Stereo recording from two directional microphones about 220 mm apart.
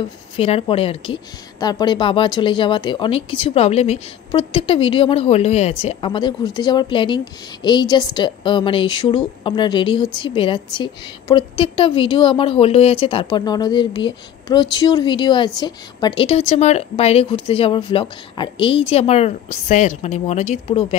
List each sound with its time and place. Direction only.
0.4 s a woman's voice: 25° left (ahead or behind)